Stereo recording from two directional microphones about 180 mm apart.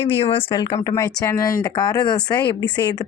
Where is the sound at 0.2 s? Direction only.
30° left (ahead or behind).